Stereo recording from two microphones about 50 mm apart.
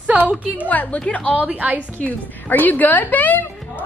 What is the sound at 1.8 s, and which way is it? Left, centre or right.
A woman's voice, left.